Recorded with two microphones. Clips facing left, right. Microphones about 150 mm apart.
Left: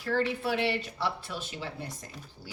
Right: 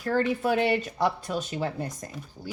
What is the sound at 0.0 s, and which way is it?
Speech, 45° right (ahead or behind).